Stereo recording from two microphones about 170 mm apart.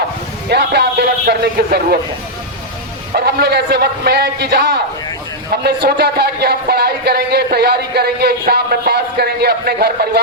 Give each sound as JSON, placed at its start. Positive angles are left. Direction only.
{"t": 0.5, "sound": "speech", "side_deg": -75}
{"t": 3.2, "sound": "speech", "side_deg": -70}